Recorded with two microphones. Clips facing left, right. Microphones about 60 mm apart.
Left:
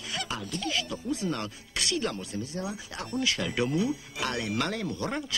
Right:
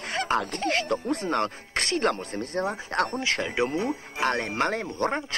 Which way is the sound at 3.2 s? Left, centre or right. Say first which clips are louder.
Right 2 dB; right.